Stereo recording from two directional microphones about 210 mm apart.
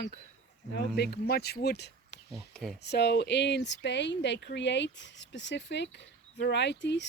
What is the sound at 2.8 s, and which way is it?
Speech, 50° left (ahead or behind).